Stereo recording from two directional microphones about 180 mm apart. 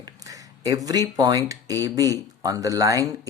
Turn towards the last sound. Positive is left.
turn(degrees=-20)  # may be behind; listen again after turning